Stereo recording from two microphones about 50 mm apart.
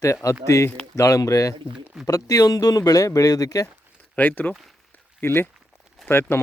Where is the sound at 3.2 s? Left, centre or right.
Left.